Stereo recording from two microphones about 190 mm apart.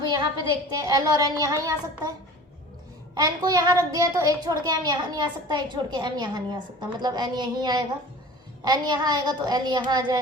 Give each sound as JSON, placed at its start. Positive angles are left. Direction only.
{"t": 0.1, "sound": "a child's voice", "side_deg": -20}
{"t": 3.2, "sound": "a child's voice", "side_deg": -20}